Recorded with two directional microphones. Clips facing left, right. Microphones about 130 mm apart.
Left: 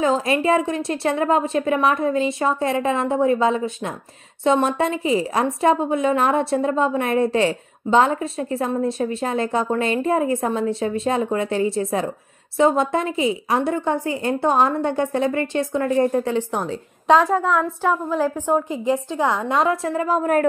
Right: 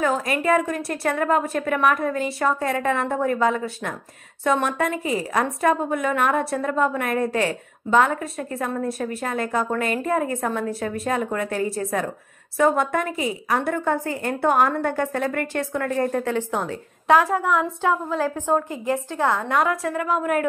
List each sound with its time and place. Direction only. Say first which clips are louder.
0.0 s a woman's voice: left 3 dB; 25° left (ahead or behind)
17.2 s a woman's voice: left 2 dB; 10° right (ahead or behind)
17.8 s a woman's voice: left 2 dB; 15° left (ahead or behind); by 20.4 s 35° left (ahead or behind)